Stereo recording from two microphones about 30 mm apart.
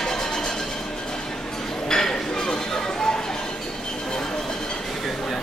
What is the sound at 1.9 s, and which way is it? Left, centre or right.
Chink, left.